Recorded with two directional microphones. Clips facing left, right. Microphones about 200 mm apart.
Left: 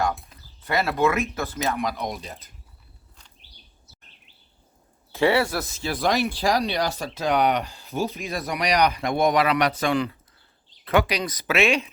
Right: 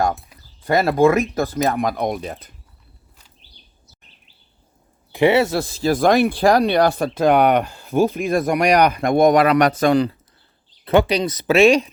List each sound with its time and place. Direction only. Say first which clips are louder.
0.7 s speech: right 7 dB; 40° right (ahead or behind); by 2.5 s 55° right (ahead or behind)
5.1 s speech: right 5 dB; 20° right (ahead or behind); by 11.9 s 35° right (ahead or behind)